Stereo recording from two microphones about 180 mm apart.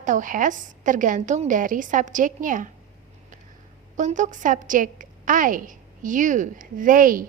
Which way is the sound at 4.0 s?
45° right (ahead or behind).